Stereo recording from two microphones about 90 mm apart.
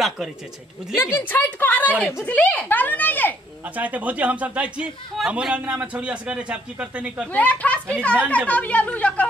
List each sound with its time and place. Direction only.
0.9 s a woman's voice: 25° left (ahead or behind)
3.6 s speech: 15° right (ahead or behind)
7.3 s speech: 15° left (ahead or behind)